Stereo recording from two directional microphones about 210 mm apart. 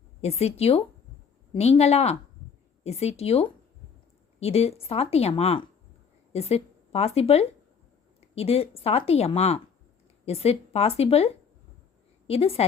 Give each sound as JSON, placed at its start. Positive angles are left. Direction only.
{"t": 0.2, "sound": "speech", "side_deg": 30}
{"t": 12.3, "sound": "speech", "side_deg": 30}